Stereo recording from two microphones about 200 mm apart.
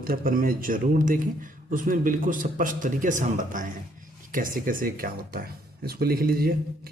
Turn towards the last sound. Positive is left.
turn(degrees=-50)  # may be behind; listen again after turning